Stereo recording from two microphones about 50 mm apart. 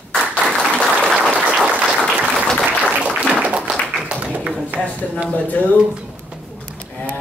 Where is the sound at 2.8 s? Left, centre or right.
Right.